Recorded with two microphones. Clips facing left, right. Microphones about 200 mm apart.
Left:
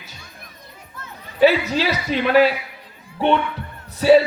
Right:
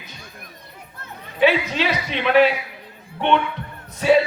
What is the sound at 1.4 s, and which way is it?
A woman's voice, 40° left (ahead or behind).